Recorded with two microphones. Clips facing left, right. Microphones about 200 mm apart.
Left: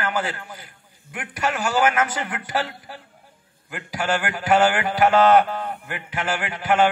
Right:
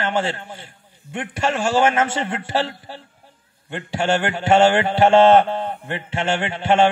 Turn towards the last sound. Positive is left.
turn(degrees=-25)  # may be behind; listen again after turning